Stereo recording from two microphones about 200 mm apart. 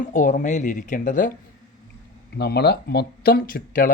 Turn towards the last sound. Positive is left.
turn(degrees=45)  # may be behind; listen again after turning